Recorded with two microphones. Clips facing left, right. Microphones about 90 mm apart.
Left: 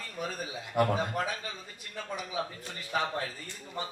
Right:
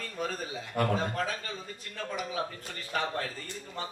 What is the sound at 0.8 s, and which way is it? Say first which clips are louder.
Speech: left 2 dB; 15° left (ahead or behind).